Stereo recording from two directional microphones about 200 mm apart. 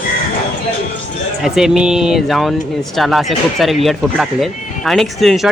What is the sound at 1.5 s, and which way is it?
Speech, centre (ahead or behind).